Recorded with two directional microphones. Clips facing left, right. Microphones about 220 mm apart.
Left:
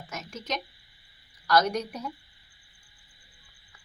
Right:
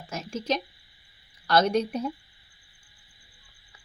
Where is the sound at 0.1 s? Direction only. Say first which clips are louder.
Right 6 dB; 30° right (ahead or behind).